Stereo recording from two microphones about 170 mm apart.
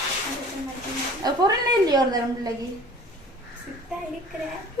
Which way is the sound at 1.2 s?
25° right (ahead or behind).